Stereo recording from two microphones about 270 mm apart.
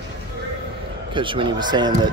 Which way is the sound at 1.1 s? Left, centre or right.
Centre.